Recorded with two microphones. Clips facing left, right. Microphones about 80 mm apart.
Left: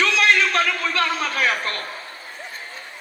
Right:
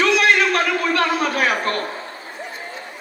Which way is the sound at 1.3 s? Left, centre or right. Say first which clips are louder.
Right 3 dB; right.